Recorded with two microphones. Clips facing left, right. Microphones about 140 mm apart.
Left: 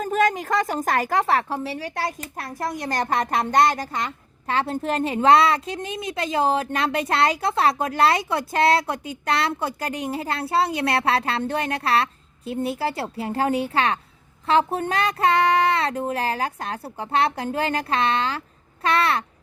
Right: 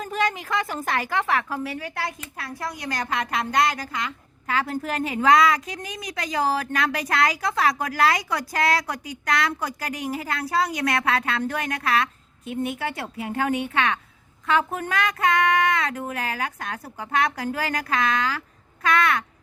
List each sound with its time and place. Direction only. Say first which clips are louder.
0.0 s a woman's voice: left 5 dB; 45° left (ahead or behind)